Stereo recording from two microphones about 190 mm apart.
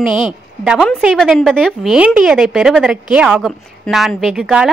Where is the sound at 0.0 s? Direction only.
5° right (ahead or behind).